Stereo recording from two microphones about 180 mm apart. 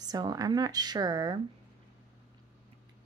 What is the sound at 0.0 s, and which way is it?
Speech, 20° right (ahead or behind).